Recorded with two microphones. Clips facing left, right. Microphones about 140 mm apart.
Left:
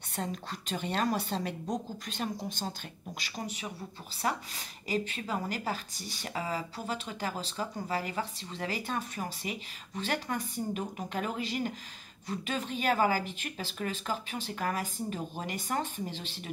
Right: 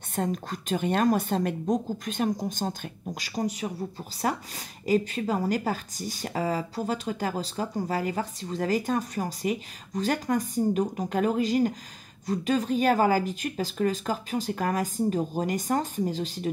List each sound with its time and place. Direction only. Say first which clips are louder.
0.1 s a woman's voice: right 7 dB; 50° right (ahead or behind)